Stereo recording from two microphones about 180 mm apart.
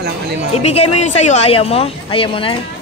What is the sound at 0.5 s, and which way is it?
Speech, 35° left (ahead or behind).